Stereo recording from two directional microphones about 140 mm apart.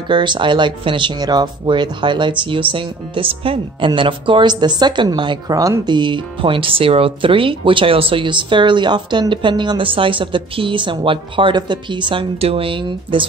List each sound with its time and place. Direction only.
0.1 s speech: 35° right (ahead or behind)